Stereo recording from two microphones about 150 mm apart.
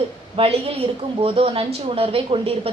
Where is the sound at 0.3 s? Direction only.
40° right (ahead or behind).